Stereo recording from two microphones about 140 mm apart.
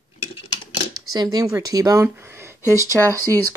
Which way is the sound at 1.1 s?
25° right (ahead or behind).